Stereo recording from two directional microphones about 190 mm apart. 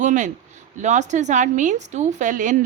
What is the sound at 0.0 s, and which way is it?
A woman's voice, 40° right (ahead or behind).